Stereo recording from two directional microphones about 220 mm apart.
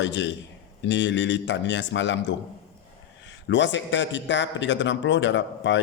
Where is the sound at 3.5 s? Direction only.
55° left (ahead or behind).